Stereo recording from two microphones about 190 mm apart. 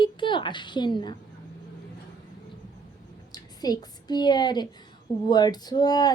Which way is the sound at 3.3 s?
20° left (ahead or behind).